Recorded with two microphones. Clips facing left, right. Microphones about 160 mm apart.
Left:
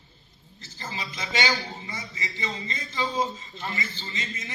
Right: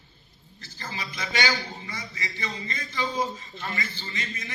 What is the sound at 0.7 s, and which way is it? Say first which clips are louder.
A man's voice: even; 20° left (ahead or behind).